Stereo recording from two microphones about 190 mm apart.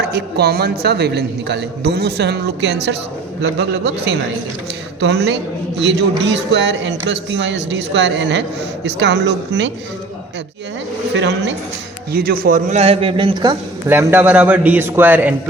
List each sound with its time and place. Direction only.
0.0 s speech: 55° right (ahead or behind)
11.1 s speech: 65° right (ahead or behind)
12.1 s a man's voice: 50° right (ahead or behind); by 13.9 s 20° right (ahead or behind)
13.9 s a man's voice: 10° right (ahead or behind)